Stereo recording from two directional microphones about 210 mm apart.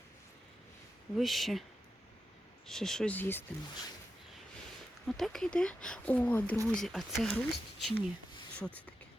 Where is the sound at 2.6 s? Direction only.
Centre (ahead or behind).